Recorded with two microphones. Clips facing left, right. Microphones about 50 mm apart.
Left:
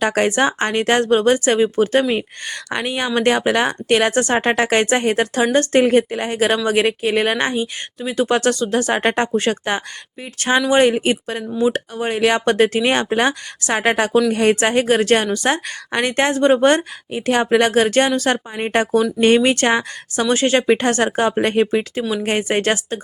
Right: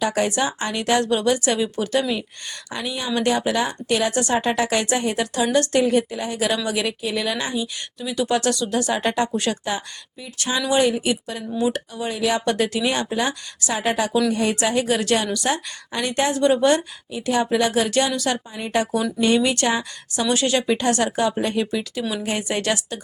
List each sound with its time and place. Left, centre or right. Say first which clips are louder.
0.0 s a woman's voice: left 5 dB; left
10.7 s a woman's voice: left 3 dB; left